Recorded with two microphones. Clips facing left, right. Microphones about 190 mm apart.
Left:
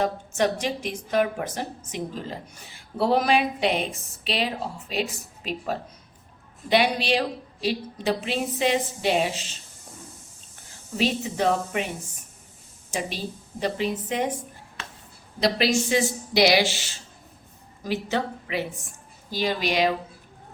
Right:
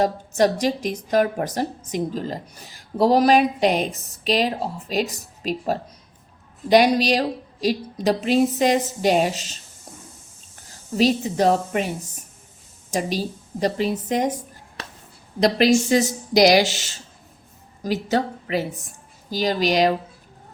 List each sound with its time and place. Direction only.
0.0 s a woman's voice: 40° right (ahead or behind)
10.9 s a woman's voice: 40° right (ahead or behind)
12.9 s a woman's voice: 40° right (ahead or behind)
15.4 s speech: 45° right (ahead or behind)
17.8 s a woman's voice: 40° right (ahead or behind)